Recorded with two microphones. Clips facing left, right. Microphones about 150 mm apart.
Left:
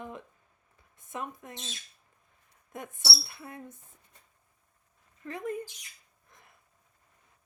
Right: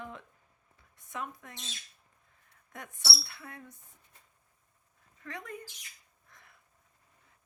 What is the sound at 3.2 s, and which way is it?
Speech, 20° left (ahead or behind).